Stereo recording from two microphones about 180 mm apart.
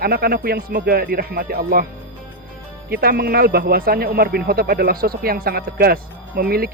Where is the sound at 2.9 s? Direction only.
55° right (ahead or behind).